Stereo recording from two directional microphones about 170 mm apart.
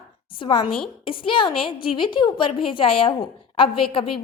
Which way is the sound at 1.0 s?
30° left (ahead or behind).